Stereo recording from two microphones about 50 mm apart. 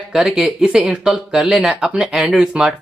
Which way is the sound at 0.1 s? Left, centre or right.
Centre.